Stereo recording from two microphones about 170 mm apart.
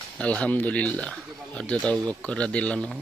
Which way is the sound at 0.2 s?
10° left (ahead or behind).